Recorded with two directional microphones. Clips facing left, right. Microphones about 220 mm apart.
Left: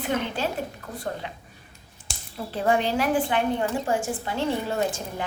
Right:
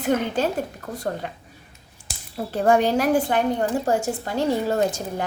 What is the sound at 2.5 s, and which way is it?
A woman's voice, 45° right (ahead or behind).